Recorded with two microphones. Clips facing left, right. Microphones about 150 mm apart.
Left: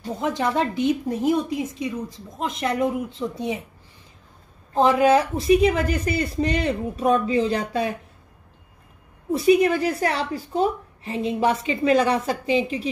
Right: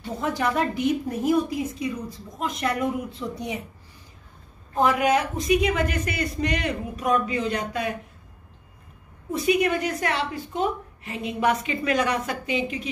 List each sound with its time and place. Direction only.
0.2 s a woman's voice: 25° left (ahead or behind)
4.7 s a woman's voice: 25° left (ahead or behind)
9.3 s a woman's voice: 30° left (ahead or behind)